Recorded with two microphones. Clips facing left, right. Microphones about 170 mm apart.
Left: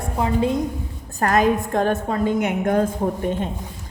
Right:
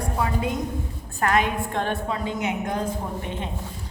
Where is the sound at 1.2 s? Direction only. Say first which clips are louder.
Left 5 dB; 40° left (ahead or behind).